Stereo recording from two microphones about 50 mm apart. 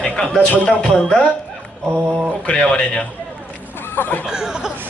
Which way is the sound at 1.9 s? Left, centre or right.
Right.